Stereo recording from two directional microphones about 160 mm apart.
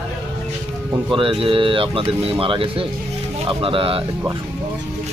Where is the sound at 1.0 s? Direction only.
30° right (ahead or behind).